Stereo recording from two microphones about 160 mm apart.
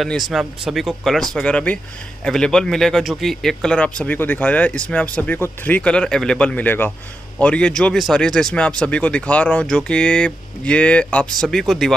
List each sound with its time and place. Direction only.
0.0 s speech: centre (ahead or behind)